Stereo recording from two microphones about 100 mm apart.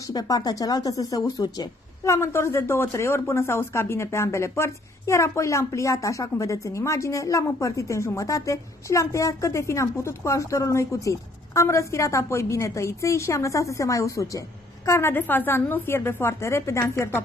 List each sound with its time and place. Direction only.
0.0 s speech: 40° left (ahead or behind)
2.1 s a woman's voice: 25° left (ahead or behind)